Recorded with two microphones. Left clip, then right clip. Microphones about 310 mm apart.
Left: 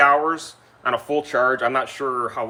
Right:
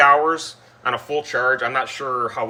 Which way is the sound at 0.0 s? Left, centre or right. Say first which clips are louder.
Right 2 dB; centre.